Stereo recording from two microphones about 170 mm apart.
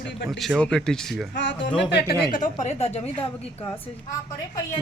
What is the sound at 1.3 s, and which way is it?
Speech, 90° left.